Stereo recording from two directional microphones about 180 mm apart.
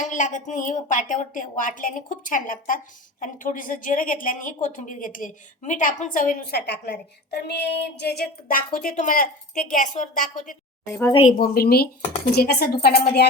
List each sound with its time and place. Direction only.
0.0 s a woman's voice: 45° left (ahead or behind)
10.8 s speech: 15° left (ahead or behind)
11.1 s speech: 35° left (ahead or behind)
11.3 s speech: 60° left (ahead or behind)